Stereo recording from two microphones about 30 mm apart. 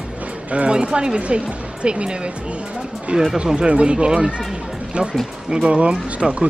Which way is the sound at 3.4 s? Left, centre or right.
Right.